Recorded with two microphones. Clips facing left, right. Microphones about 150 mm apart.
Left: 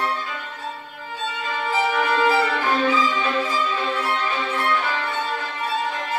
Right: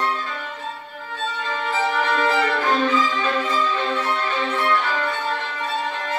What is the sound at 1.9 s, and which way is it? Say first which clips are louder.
Violin: left 1 dB; 10° left (ahead or behind).